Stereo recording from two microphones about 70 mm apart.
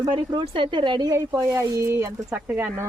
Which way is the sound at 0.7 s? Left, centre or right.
Right.